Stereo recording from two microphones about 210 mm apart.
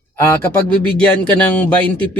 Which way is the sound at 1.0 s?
10° left (ahead or behind).